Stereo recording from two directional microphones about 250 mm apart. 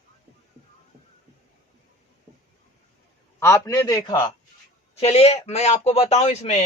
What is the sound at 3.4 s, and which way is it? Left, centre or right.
A man's voice, centre.